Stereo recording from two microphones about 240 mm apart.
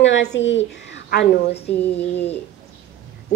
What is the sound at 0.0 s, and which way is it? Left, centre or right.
A woman's voice, left.